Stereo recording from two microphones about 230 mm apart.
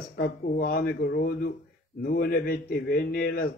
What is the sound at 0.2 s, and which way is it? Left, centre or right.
A man's voice, left.